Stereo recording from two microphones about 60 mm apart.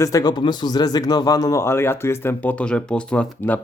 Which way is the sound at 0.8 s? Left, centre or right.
Left.